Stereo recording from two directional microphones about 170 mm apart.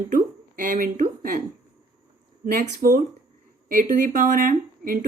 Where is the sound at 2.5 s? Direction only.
55° right (ahead or behind).